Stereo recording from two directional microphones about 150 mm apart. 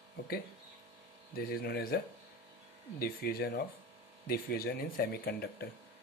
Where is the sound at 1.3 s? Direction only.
90° left.